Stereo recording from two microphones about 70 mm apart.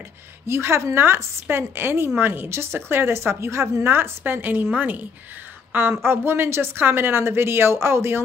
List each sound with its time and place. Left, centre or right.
0.5 s a woman's voice: right